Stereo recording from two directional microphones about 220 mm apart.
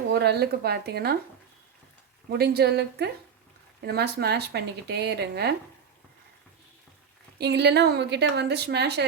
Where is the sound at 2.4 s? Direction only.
45° right (ahead or behind).